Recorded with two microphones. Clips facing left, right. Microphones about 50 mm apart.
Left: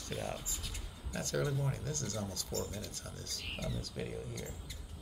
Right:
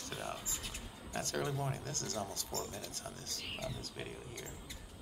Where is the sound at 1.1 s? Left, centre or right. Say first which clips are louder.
Left 2 dB; right.